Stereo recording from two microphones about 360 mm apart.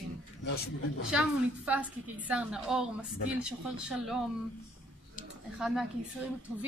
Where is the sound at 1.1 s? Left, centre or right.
Centre.